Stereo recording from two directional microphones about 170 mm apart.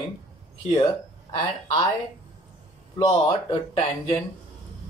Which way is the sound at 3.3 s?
35° left (ahead or behind).